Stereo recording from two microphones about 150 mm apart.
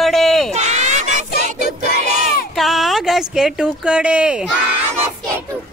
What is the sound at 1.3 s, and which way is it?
Choir, 90° left.